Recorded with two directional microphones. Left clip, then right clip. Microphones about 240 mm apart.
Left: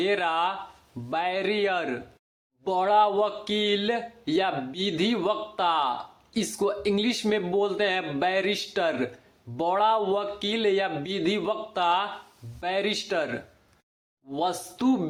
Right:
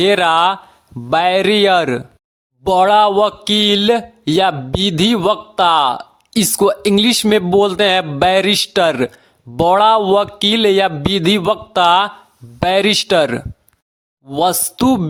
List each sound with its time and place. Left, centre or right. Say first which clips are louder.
0.0 s speech: right 13 dB; right